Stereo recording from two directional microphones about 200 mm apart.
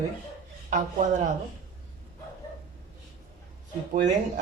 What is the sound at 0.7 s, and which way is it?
Speech, 40° right (ahead or behind).